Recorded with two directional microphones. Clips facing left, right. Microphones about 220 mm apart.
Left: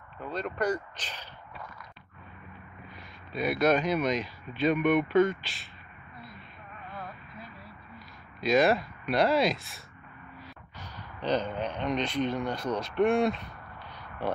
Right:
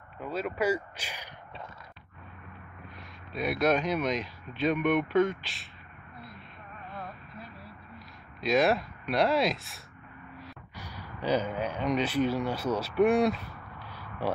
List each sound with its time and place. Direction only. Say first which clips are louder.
0.2 s speech: right 1 dB; 5° right (ahead or behind)
3.0 s speech: left 2 dB; centre (ahead or behind)
6.9 s a sound: even; centre (ahead or behind)
10.8 s speech: right 1 dB; 10° right (ahead or behind)